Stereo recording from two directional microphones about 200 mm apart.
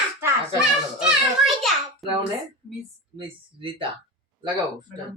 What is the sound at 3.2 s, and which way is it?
Speech, 25° right (ahead or behind).